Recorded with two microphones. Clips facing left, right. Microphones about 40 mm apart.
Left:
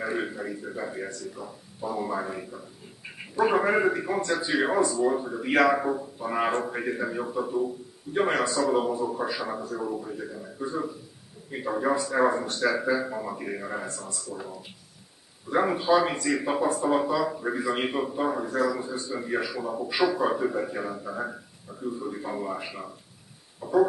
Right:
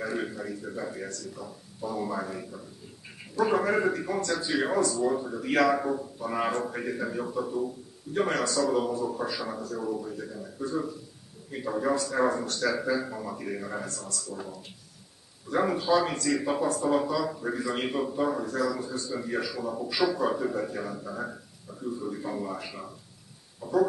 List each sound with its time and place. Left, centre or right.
0.0 s speech: centre
15.5 s speech: centre
23.6 s owl: centre